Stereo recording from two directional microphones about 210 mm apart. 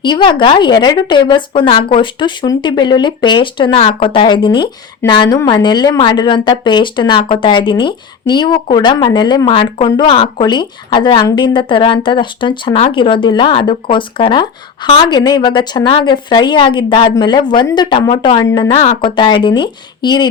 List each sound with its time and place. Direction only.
0.0 s a woman's voice: 20° left (ahead or behind)